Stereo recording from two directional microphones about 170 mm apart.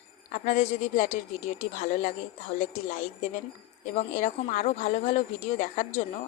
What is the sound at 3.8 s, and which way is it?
Speech, 50° left (ahead or behind).